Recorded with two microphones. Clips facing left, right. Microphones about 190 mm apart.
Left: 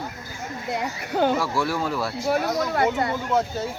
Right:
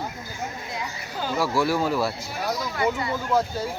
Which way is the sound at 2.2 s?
65° left (ahead or behind).